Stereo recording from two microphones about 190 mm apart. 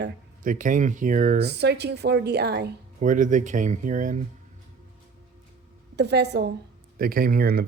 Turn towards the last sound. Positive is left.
turn(degrees=-55)  # may be behind; listen again after turning